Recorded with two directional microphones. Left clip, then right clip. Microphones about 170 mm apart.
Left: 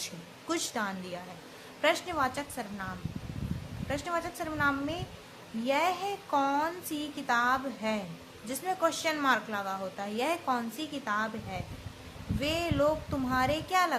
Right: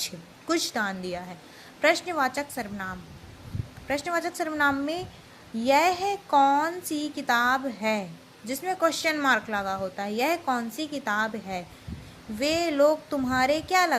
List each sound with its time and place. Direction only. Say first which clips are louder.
0.0 s a woman's voice: right 6 dB; 20° right (ahead or behind)